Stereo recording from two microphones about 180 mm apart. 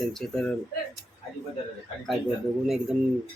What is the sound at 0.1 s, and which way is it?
Speech, 5° left (ahead or behind).